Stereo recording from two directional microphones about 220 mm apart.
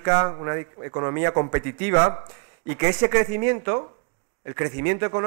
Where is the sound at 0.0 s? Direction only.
20° right (ahead or behind).